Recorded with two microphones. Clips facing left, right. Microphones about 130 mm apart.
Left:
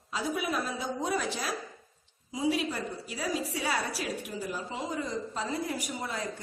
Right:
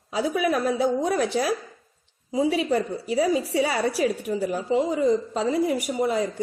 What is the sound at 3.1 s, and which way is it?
A woman's voice, 70° right (ahead or behind).